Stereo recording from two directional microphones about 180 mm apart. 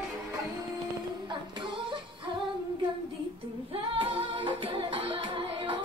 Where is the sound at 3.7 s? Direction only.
30° right (ahead or behind).